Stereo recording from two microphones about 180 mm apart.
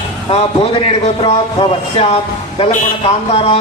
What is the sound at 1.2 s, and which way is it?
A man's voice, 25° left (ahead or behind).